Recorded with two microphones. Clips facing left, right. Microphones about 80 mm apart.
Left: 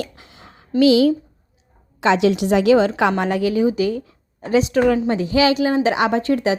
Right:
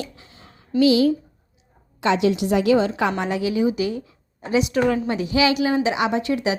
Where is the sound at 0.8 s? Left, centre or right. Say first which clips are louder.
Left 3 dB; left.